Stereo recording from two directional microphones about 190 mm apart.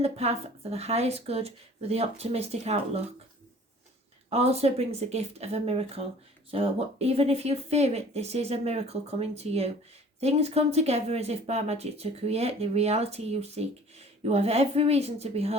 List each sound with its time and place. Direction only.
0.0 s speech: 35° right (ahead or behind)
4.3 s speech: 35° right (ahead or behind)